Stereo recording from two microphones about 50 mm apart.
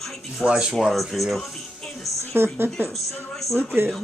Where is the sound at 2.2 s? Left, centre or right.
Right.